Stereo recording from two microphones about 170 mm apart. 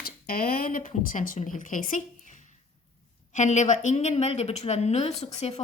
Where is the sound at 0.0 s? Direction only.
60° left (ahead or behind).